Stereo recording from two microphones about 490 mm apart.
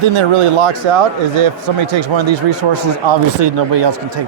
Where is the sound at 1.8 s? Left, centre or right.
Right.